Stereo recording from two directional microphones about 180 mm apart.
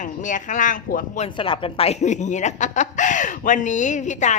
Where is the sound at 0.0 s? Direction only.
45° left (ahead or behind).